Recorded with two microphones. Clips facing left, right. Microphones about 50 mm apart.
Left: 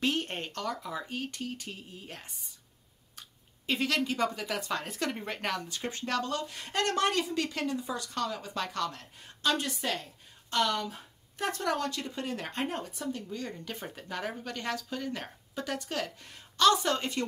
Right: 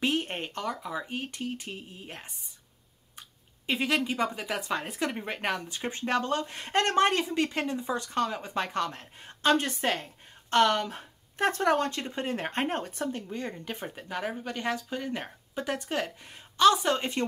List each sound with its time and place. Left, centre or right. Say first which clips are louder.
0.0 s speech: right 2 dB; centre; by 13.2 s right
13.3 s speech: right 3 dB; right
13.9 s speech: right 2 dB; centre